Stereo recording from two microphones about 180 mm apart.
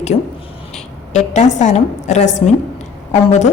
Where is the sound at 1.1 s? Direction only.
40° left (ahead or behind).